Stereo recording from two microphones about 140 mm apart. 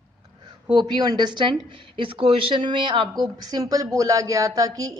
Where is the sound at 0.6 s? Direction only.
30° right (ahead or behind).